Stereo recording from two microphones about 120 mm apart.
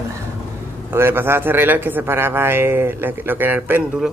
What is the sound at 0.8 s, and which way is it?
A man's voice, 20° right (ahead or behind).